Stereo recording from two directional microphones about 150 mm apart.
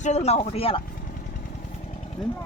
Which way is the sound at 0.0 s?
45° left (ahead or behind).